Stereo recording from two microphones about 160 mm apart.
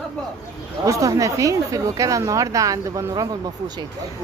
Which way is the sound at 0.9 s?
20° right (ahead or behind).